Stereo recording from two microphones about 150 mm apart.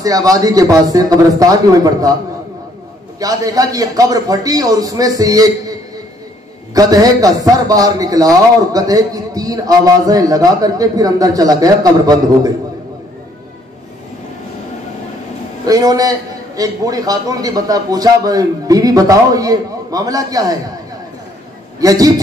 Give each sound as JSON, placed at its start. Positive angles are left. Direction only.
{"t": 0.0, "sound": "a man's voice", "side_deg": -25}
{"t": 3.2, "sound": "a man's voice", "side_deg": -25}
{"t": 15.6, "sound": "a man's voice", "side_deg": -25}
{"t": 21.7, "sound": "a man's voice", "side_deg": -25}